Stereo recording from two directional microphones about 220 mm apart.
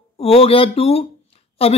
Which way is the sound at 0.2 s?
25° left (ahead or behind).